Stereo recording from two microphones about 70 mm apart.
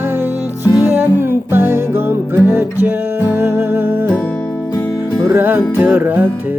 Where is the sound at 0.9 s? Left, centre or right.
Right.